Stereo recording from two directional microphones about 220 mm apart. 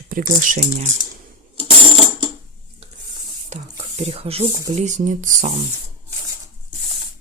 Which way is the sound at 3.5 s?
30° right (ahead or behind).